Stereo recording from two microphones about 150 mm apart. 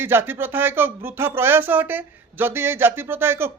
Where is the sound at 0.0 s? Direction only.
15° right (ahead or behind).